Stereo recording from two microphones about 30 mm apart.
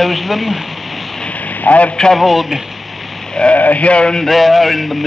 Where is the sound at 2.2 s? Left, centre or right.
Centre.